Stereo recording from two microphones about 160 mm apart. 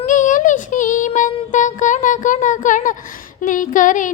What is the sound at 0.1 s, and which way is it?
Child singing, 55° left (ahead or behind).